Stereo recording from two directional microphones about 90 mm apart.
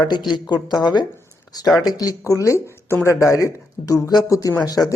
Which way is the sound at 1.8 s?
45° left (ahead or behind).